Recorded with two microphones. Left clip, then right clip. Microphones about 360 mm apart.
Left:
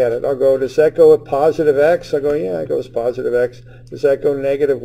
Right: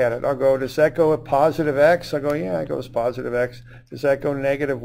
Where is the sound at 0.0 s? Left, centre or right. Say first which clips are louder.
Left 4 dB; right.